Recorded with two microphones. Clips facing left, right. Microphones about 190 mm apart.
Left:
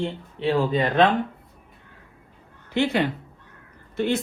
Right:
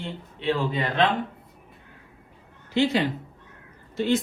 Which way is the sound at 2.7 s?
60° left (ahead or behind).